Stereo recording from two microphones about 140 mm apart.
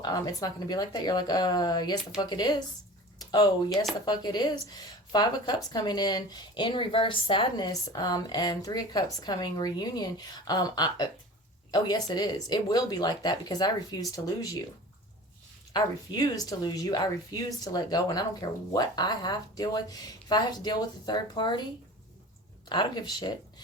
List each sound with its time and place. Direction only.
0.0 s speech: 25° left (ahead or behind)
15.7 s speech: 30° left (ahead or behind)
22.7 s speech: 30° left (ahead or behind)